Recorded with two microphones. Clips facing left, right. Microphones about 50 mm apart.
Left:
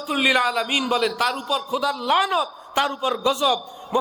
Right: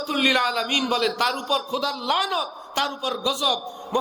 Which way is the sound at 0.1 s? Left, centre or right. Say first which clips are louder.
Left 2 dB; centre.